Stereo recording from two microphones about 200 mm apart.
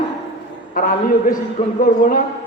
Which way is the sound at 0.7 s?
40° left (ahead or behind).